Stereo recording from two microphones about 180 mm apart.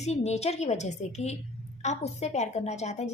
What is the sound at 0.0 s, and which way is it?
A woman's voice, 35° left (ahead or behind).